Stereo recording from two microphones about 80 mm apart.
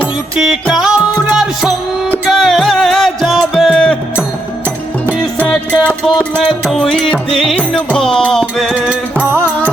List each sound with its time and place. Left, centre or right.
0.3 s music: centre
2.3 s music: centre
5.5 s music: centre
8.7 s music: centre